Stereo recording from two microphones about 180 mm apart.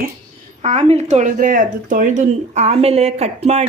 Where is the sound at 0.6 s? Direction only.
40° right (ahead or behind).